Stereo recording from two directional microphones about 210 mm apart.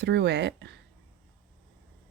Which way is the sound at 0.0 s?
55° right (ahead or behind).